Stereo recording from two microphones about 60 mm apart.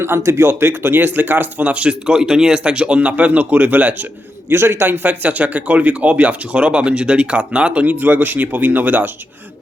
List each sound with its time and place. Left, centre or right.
0.0 s a man's voice: right
4.4 s a man's voice: right